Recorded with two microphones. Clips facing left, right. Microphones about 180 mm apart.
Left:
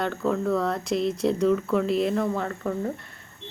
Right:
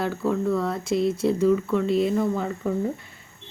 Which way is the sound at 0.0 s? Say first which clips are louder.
Right 1 dB; 5° right (ahead or behind).